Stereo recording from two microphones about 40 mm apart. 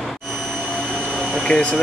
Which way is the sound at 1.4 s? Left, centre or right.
Left.